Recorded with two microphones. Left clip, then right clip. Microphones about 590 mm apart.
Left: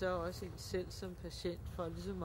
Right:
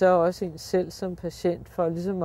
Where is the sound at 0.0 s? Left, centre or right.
Right.